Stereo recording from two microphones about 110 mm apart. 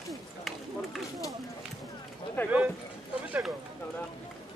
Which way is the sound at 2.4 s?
15° left (ahead or behind).